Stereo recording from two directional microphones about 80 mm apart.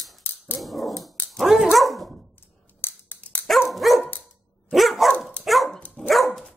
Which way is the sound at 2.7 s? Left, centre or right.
Left.